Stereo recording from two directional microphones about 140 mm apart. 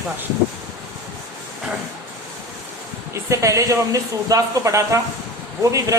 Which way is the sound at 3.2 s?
20° right (ahead or behind).